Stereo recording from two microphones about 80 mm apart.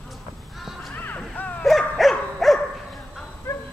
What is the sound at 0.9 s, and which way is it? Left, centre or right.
Music, left.